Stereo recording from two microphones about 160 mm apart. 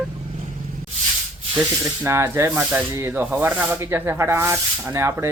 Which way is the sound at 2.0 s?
15° right (ahead or behind).